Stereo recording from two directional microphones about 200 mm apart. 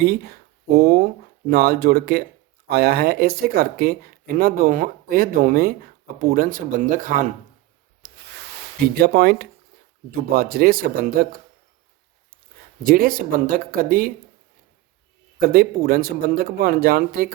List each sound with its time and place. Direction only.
0.0 s speech: 50° right (ahead or behind)
8.8 s speech: 50° right (ahead or behind)
12.8 s speech: 45° right (ahead or behind)
15.4 s speech: 50° right (ahead or behind)